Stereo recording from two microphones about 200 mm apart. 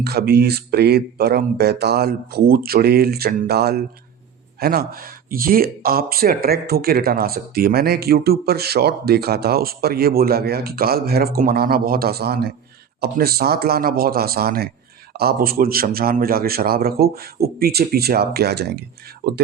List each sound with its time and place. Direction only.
0.0 s speech: 55° right (ahead or behind)